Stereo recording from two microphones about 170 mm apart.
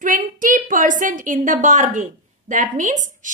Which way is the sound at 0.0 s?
50° right (ahead or behind).